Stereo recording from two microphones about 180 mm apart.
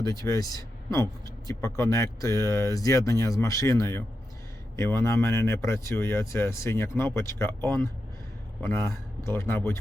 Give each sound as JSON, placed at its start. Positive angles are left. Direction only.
{"t": 0.0, "sound": "speech", "side_deg": 20}